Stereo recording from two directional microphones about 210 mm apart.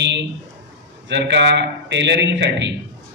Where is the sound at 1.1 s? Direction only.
55° right (ahead or behind).